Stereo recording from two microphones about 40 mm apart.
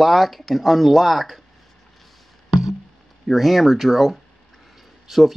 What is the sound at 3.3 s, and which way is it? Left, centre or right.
Speech, centre.